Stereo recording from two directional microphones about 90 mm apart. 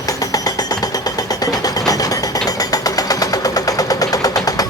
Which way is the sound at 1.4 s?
45° left (ahead or behind).